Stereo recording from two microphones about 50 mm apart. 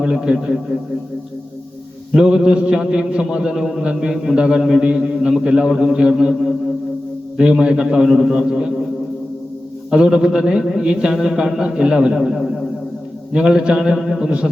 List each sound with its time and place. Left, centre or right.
0.0 s a man's voice: centre
2.1 s a man's voice: centre
7.6 s a man's voice: centre
9.9 s a man's voice: centre
13.3 s a man's voice: centre